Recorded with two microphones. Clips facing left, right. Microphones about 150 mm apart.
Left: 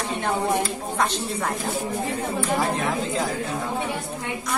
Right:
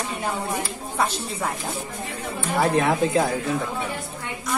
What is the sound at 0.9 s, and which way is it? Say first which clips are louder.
Speech: right 1 dB; 5° right (ahead or behind).